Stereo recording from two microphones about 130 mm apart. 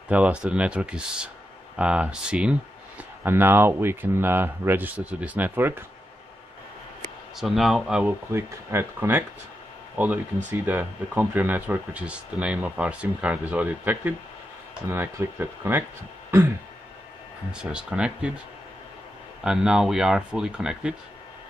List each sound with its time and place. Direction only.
0.1 s speech: 10° right (ahead or behind)
7.3 s speech: centre (ahead or behind)
8.3 s speech: 20° right (ahead or behind)
17.5 s speech: 5° right (ahead or behind)
19.4 s speech: 5° right (ahead or behind)